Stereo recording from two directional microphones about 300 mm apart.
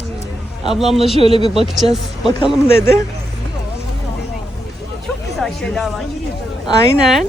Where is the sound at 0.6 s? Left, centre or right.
Centre.